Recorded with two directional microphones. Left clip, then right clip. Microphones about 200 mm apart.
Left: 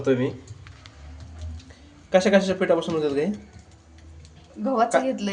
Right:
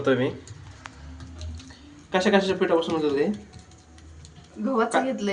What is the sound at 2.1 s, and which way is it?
Speech, 40° left (ahead or behind).